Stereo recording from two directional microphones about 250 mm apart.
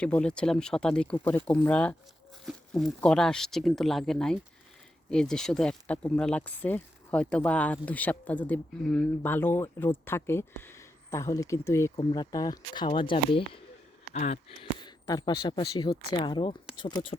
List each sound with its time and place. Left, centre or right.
0.0 s speech: centre